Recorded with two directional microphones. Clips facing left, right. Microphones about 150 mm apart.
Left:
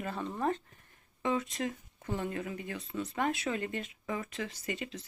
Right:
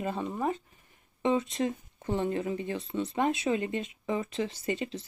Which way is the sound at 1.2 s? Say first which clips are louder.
Right 5 dB; 25° right (ahead or behind).